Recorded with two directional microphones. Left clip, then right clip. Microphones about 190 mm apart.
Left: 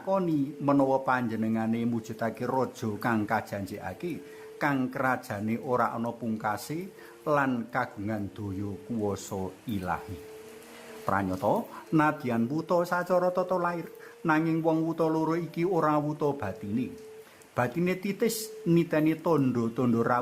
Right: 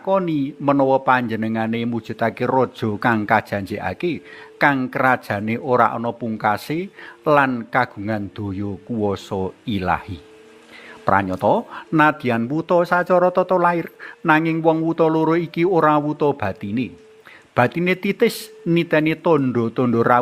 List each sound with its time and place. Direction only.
0.0 s a man's voice: 25° right (ahead or behind)
11.0 s a man's voice: 30° right (ahead or behind)